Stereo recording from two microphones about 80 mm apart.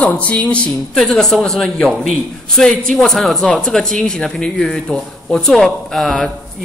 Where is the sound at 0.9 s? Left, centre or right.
Centre.